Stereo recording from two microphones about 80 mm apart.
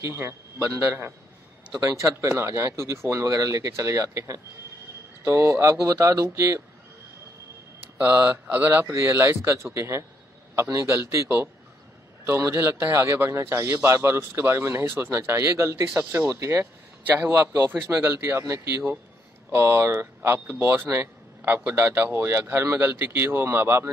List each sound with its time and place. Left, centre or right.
0.0 s a man's voice: right
8.0 s a man's voice: right